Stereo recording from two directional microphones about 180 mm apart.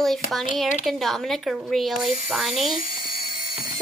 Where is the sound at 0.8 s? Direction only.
Centre (ahead or behind).